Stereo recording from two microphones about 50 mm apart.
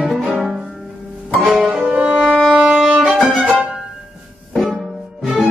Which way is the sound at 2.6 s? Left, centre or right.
Centre.